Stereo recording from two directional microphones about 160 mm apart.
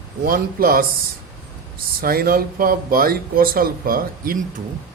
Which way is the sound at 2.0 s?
65° right (ahead or behind).